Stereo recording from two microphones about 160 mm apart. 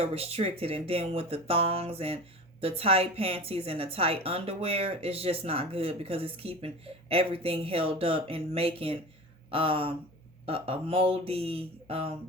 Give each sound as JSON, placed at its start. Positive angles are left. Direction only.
{"t": 0.0, "sound": "a woman's voice", "side_deg": -40}